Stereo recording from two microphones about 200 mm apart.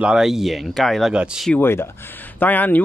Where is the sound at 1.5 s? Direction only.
10° left (ahead or behind).